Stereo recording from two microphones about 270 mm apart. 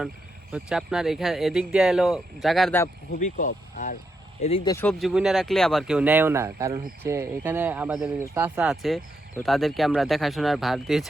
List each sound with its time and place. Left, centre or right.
0.5 s speech: centre
3.2 s speech: left; by 11.0 s centre